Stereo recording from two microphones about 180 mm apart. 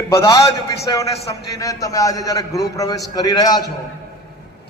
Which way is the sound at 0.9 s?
25° left (ahead or behind).